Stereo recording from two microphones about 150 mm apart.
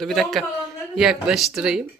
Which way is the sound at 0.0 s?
Centre (ahead or behind).